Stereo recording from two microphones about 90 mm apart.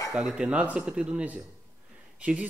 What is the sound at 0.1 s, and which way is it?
A man's voice, 5° right (ahead or behind).